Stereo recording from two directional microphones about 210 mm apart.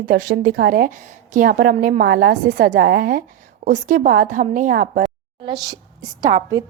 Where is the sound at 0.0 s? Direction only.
40° right (ahead or behind).